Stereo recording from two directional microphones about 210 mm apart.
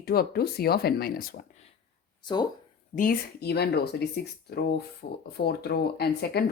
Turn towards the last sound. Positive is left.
turn(degrees=50)  # may be behind; listen again after turning